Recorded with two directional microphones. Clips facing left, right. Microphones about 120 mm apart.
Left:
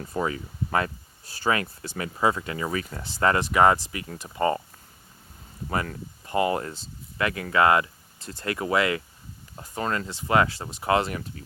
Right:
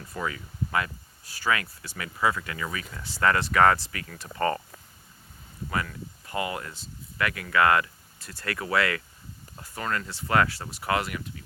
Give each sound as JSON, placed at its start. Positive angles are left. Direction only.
{"t": 0.1, "sound": "speech", "side_deg": 30}
{"t": 3.1, "sound": "speech", "side_deg": 25}
{"t": 5.6, "sound": "speech", "side_deg": 35}